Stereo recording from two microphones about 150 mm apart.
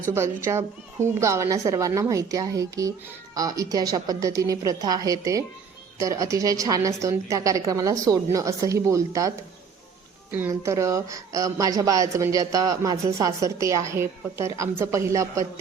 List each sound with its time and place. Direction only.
0.1 s a woman's voice: 15° right (ahead or behind)
10.3 s a woman's voice: 15° right (ahead or behind)